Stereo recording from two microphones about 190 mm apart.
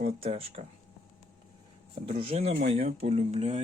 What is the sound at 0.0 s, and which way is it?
Speech, 35° right (ahead or behind).